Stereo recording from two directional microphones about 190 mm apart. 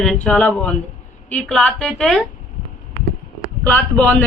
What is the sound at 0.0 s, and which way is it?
A man's voice, 5° left (ahead or behind).